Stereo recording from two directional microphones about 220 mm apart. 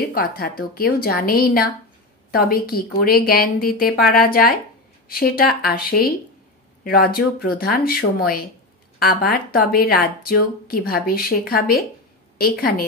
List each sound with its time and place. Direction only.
0.1 s a woman's voice: 40° left (ahead or behind)